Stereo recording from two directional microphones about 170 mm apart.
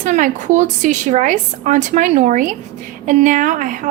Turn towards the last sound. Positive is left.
turn(degrees=-50)  # may be behind; listen again after turning